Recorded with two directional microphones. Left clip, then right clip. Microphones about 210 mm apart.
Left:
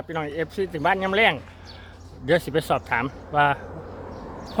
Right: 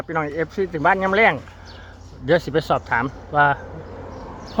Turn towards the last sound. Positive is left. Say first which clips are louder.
# right 3 dB
turn(degrees=-10)  # may be behind; listen again after turning